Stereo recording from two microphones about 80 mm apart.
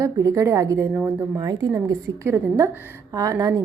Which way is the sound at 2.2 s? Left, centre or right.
Right.